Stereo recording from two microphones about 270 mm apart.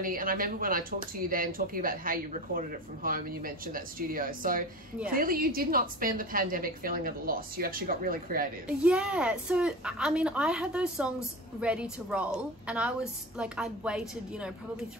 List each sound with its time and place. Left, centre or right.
0.0 s speech: right
8.6 s a woman's voice: centre